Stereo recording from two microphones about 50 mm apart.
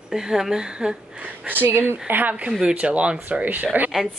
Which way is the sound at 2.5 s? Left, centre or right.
Centre.